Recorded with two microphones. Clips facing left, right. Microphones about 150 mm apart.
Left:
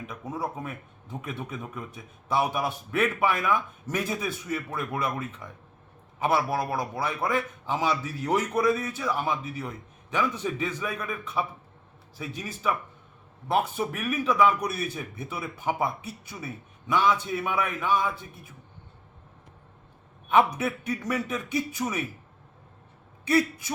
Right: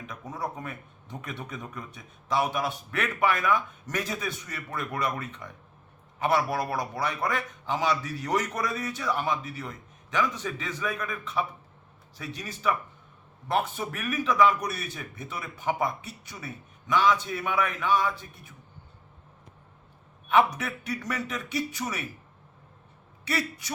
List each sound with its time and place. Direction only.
0.1 s a man's voice: 5° left (ahead or behind)
20.3 s a man's voice: 25° left (ahead or behind)
21.3 s a man's voice: 10° left (ahead or behind)